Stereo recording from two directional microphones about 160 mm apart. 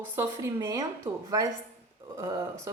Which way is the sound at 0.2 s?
20° right (ahead or behind).